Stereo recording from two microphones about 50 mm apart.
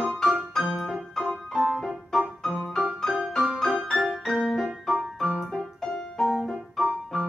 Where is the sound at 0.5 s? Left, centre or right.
Centre.